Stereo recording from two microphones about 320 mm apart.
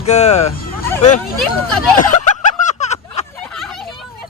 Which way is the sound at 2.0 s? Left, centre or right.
Left.